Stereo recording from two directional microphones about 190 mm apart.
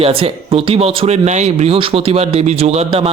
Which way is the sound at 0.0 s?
30° right (ahead or behind).